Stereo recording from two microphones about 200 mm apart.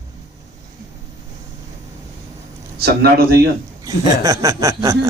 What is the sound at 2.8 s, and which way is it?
Speech, 50° right (ahead or behind).